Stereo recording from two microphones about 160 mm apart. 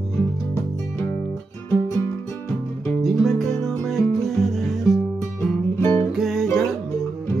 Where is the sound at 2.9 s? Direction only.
Centre (ahead or behind).